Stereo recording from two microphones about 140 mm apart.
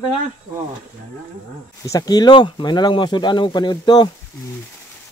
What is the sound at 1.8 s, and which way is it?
Speech, 25° left (ahead or behind).